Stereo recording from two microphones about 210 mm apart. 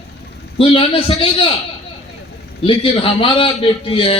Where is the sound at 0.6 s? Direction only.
25° left (ahead or behind).